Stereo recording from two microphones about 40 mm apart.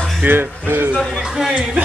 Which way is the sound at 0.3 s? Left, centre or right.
Right.